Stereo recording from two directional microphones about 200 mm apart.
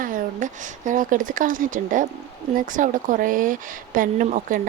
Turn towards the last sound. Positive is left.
turn(degrees=-40)  # may be behind; listen again after turning